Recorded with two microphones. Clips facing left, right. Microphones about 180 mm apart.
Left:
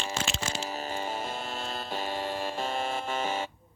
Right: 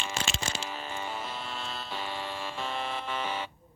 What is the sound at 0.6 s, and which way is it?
Hum, 40° left (ahead or behind).